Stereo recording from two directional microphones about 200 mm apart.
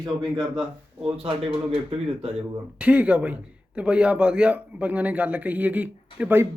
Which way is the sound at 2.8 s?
5° right (ahead or behind).